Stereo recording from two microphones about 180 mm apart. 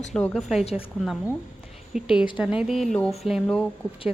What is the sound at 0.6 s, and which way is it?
Speech, 35° left (ahead or behind).